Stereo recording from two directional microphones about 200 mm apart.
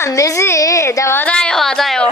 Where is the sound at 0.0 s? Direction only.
15° left (ahead or behind).